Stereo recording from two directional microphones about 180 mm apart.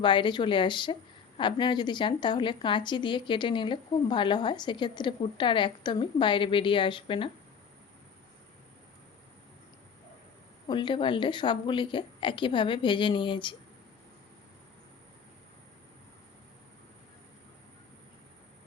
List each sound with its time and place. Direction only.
0.0 s speech: 25° left (ahead or behind)
10.7 s speech: 25° left (ahead or behind)